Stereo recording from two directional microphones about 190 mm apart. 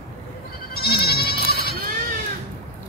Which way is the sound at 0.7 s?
55° left (ahead or behind).